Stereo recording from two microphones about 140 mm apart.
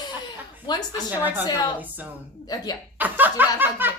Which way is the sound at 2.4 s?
30° left (ahead or behind).